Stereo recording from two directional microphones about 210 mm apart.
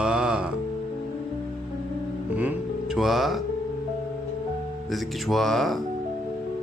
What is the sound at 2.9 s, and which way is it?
Speech, centre (ahead or behind).